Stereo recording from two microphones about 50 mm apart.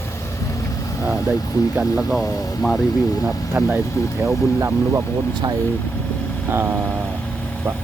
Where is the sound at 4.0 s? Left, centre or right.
Left.